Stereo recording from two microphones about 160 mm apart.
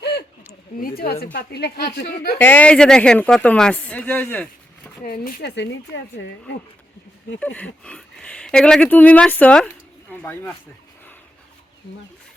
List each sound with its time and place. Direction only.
0.8 s a woman's voice: 65° left (ahead or behind)
2.4 s speech: 10° left (ahead or behind)
5.0 s a woman's voice: 65° left (ahead or behind); by 5.6 s 90° left
7.3 s speech: 10° left (ahead or behind)